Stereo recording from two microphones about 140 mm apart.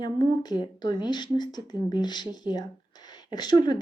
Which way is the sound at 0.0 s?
30° left (ahead or behind).